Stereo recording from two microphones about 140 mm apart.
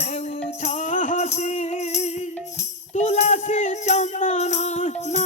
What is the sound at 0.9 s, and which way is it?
Music, 70° left (ahead or behind).